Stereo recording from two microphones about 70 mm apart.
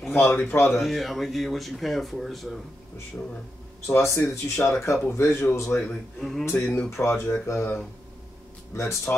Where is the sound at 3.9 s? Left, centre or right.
Left.